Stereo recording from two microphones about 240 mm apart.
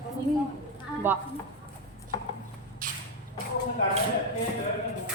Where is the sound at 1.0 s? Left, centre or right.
Centre.